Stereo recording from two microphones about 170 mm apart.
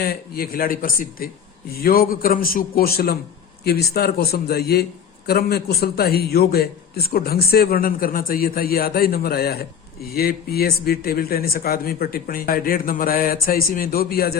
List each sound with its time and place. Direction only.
0.0 s a man's voice: 60° left (ahead or behind)